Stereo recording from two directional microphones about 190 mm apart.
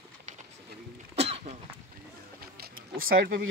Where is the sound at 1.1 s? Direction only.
35° right (ahead or behind).